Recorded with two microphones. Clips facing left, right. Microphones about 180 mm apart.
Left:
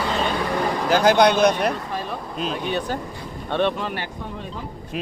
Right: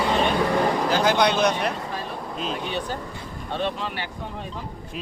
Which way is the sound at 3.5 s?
65° left (ahead or behind).